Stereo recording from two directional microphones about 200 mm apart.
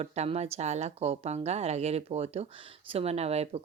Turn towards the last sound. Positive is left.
turn(degrees=-30)  # may be behind; listen again after turning